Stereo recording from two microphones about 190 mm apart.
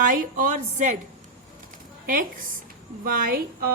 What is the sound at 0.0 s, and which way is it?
Speech, 45° right (ahead or behind).